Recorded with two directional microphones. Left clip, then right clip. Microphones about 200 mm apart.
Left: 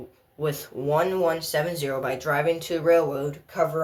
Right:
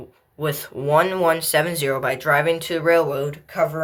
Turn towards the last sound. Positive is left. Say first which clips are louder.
# right 3 dB
turn(degrees=-10)  # may be behind; listen again after turning